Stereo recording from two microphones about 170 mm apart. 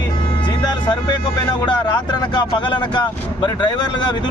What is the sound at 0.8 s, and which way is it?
Speech, 25° left (ahead or behind).